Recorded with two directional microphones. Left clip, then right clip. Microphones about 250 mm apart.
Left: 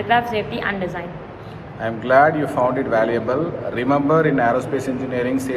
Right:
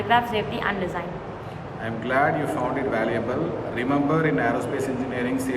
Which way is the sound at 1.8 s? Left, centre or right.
Centre.